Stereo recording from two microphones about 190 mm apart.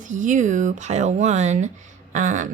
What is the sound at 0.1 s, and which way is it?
Speech, 40° right (ahead or behind).